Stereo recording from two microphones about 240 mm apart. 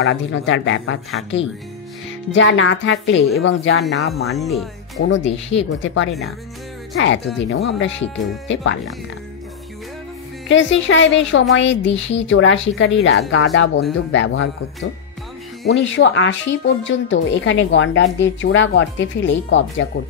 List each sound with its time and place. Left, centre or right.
0.0 s speech: left
4.3 s speech: centre
5.0 s speech: left
7.3 s speech: left
10.5 s speech: left
15.6 s speech: left